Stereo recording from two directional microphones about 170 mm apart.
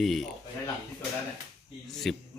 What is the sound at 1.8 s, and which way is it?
Speech, centre (ahead or behind).